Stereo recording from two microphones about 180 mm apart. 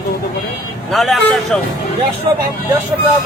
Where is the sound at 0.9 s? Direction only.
Centre (ahead or behind).